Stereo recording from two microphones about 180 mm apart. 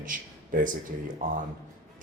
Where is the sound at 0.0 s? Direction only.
45° right (ahead or behind).